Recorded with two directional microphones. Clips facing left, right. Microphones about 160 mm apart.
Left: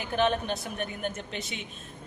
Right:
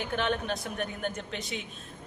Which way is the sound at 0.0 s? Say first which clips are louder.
Left 3 dB; centre (ahead or behind).